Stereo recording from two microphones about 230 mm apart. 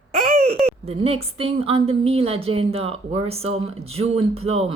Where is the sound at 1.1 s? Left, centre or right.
Right.